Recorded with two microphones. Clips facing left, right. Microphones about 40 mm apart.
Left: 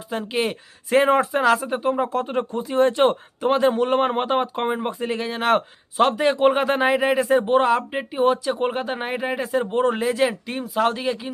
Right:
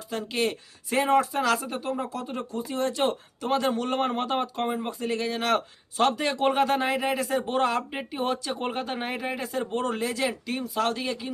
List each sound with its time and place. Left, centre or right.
0.1 s speech: centre
0.9 s speech: left
2.0 s speech: left
7.5 s speech: centre